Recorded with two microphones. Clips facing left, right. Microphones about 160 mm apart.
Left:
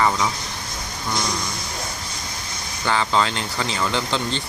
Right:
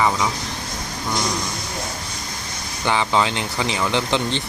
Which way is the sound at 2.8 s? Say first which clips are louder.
Right 1 dB; 15° right (ahead or behind).